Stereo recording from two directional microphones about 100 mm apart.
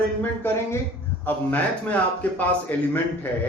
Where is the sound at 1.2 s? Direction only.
20° left (ahead or behind).